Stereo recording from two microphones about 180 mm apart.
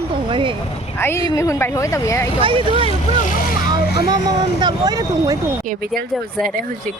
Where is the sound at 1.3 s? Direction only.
15° left (ahead or behind).